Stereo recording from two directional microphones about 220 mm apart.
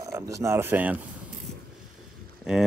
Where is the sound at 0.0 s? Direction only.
15° right (ahead or behind).